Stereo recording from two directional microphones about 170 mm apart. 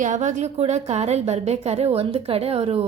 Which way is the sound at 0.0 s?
45° right (ahead or behind).